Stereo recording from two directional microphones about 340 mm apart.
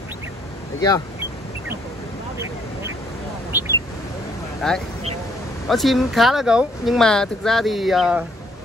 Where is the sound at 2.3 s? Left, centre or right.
Centre.